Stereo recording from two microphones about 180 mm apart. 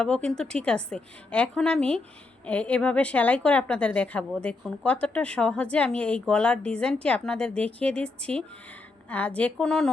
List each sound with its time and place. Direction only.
0.0 s a woman's voice: 5° left (ahead or behind)